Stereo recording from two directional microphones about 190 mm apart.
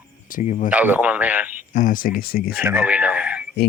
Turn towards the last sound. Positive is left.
turn(degrees=-5)  # may be behind; listen again after turning